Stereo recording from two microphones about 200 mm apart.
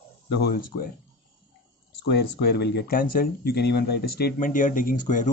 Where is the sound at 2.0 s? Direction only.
55° left (ahead or behind).